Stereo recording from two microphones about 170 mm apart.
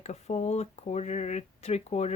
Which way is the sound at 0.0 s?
40° left (ahead or behind).